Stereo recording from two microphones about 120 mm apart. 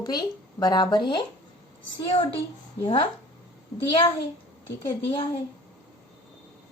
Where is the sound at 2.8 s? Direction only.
45° left (ahead or behind).